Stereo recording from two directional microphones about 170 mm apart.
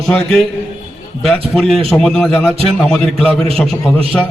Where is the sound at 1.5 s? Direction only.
Centre (ahead or behind).